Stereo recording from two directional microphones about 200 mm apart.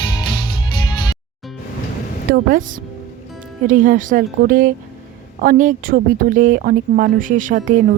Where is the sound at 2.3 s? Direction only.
45° right (ahead or behind).